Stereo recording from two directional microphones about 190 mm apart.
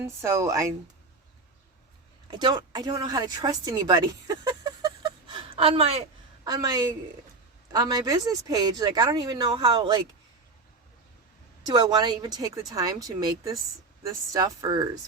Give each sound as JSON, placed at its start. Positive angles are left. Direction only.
{"t": 0.0, "sound": "speech", "side_deg": -15}
{"t": 2.2, "sound": "speech", "side_deg": -25}
{"t": 11.6, "sound": "speech", "side_deg": -20}